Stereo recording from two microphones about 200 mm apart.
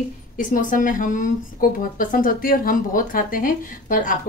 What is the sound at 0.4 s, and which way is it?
Speech, 40° left (ahead or behind).